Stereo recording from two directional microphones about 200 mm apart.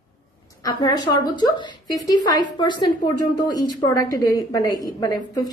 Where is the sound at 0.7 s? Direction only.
20° left (ahead or behind).